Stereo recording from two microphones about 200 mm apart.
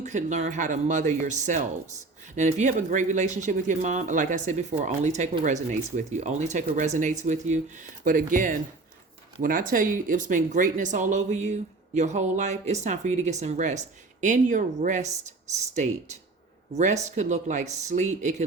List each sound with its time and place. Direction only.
0.0 s speech: 35° right (ahead or behind)